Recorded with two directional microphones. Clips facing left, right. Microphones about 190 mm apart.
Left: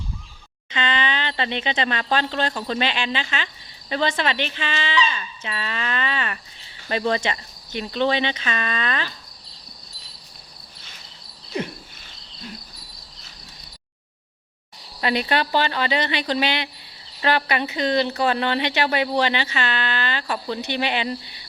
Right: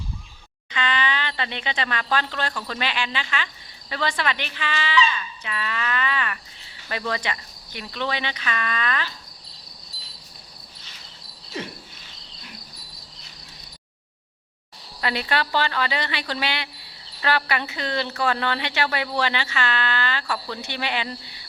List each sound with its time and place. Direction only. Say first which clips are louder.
0.7 s speech: left 1 dB; 25° left (ahead or behind)
15.0 s speech: left 3 dB; 20° left (ahead or behind)